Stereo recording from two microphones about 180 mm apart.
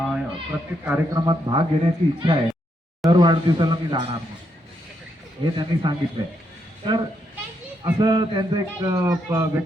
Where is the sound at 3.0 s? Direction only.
25° right (ahead or behind).